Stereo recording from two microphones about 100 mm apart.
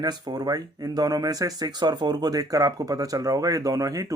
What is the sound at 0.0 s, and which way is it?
Speech, 40° right (ahead or behind).